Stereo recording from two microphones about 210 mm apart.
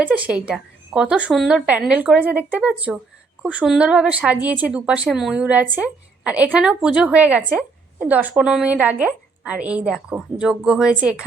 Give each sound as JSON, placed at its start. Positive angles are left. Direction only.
{"t": 0.0, "sound": "a woman's voice", "side_deg": -5}